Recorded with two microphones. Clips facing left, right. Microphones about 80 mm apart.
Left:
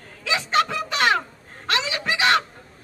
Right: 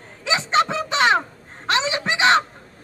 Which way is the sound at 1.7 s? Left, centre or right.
Right.